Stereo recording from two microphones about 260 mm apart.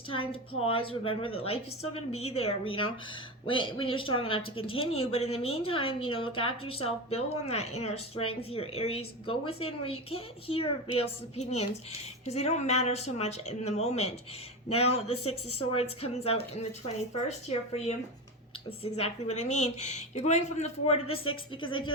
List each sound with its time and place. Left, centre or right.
0.1 s speech: left